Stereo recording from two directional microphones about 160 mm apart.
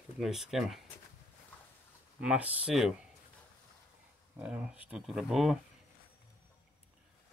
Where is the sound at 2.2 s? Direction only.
10° right (ahead or behind).